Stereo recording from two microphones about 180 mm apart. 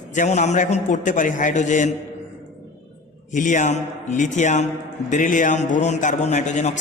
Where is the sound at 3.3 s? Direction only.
45° left (ahead or behind).